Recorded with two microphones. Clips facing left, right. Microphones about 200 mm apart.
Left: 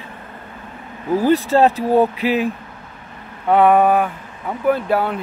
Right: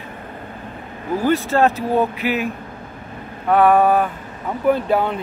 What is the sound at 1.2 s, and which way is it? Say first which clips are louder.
Speech: left 2 dB; 35° left (ahead or behind).